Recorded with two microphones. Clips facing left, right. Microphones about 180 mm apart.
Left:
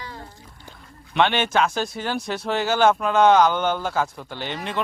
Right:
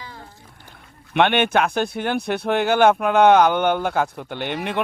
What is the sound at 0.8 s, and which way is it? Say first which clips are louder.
Speech: right 2 dB; 60° right (ahead or behind).